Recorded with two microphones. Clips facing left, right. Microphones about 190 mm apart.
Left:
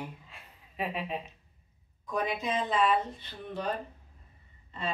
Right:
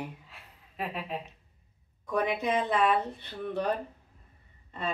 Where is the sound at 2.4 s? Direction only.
60° right (ahead or behind).